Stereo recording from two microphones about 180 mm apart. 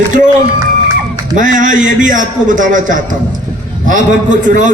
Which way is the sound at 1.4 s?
45° right (ahead or behind).